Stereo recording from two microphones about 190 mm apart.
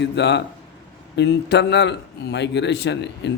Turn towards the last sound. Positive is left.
turn(degrees=65)  # may be behind; listen again after turning